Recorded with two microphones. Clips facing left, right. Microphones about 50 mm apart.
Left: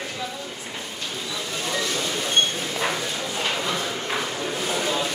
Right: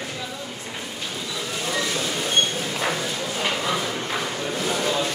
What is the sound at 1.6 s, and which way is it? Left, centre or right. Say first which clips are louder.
Train: right 1 dB; centre.